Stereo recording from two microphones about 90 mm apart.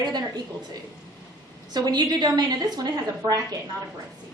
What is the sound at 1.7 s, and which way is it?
A woman's voice, 50° right (ahead or behind).